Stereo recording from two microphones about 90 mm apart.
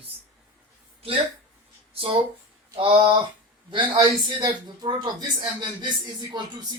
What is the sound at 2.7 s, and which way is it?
Speech, 65° right (ahead or behind).